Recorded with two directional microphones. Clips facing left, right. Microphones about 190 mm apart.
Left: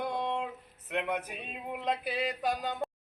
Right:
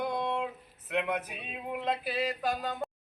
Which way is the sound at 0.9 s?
5° right (ahead or behind).